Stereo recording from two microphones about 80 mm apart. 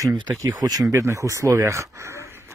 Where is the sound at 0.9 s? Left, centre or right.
Right.